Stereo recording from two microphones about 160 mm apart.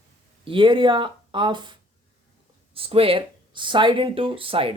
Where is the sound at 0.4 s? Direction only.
30° right (ahead or behind).